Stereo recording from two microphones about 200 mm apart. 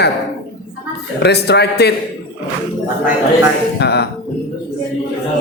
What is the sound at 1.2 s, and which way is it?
Speech, 55° left (ahead or behind).